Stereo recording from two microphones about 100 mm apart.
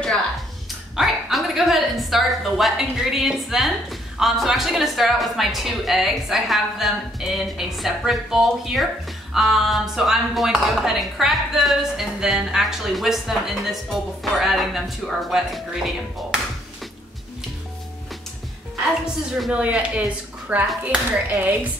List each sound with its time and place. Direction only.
0.9 s a woman's voice: centre (ahead or behind)
19.5 s speech: 10° right (ahead or behind)